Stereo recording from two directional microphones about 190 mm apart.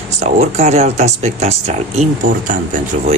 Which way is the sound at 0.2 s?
35° right (ahead or behind).